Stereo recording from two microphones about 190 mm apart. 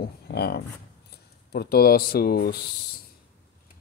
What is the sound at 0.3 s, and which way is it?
Speech, 60° left (ahead or behind).